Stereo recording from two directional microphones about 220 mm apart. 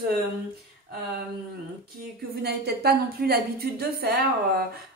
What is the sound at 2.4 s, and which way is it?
A woman's voice, 45° right (ahead or behind).